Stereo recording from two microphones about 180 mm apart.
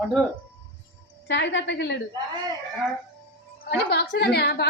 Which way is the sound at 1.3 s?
85° left.